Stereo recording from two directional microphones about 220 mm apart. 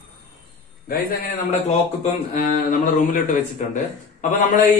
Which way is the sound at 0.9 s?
40° left (ahead or behind).